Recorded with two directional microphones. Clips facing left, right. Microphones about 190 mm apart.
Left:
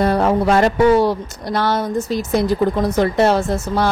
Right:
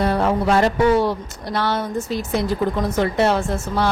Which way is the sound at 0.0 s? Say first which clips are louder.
Left 3 dB; 45° left (ahead or behind).